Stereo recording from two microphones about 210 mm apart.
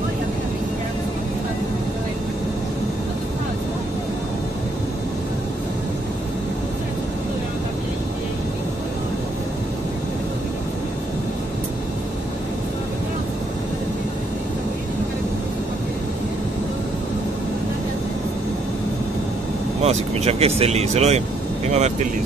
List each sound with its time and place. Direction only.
19.8 s speech: 30° right (ahead or behind)